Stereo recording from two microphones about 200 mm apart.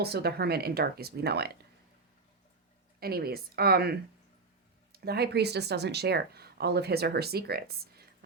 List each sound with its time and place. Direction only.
0.0 s speech: 55° right (ahead or behind)
3.0 s speech: 50° right (ahead or behind)